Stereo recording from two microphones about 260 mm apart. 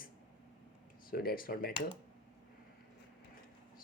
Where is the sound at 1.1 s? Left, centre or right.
Left.